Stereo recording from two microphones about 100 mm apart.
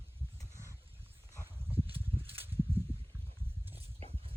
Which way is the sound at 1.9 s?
70° right (ahead or behind).